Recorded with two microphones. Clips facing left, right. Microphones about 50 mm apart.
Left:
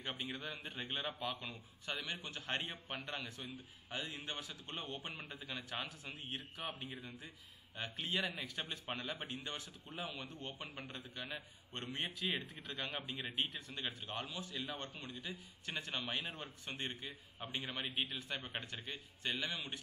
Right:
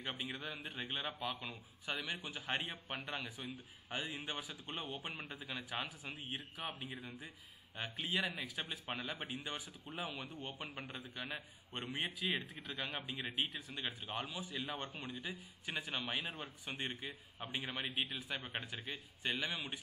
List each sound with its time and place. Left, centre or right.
0.0 s a man's voice: centre
15.0 s a man's voice: centre
15.7 s a man's voice: centre